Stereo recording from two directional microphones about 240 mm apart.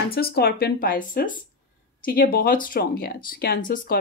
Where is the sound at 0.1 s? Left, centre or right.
Left.